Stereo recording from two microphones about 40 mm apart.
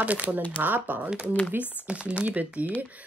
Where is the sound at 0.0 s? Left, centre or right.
Right.